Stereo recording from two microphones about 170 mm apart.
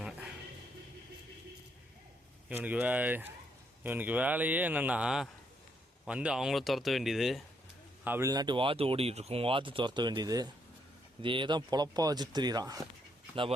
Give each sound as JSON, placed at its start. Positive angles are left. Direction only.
{"t": 2.5, "sound": "a man's voice", "side_deg": -10}
{"t": 8.0, "sound": "speech", "side_deg": -15}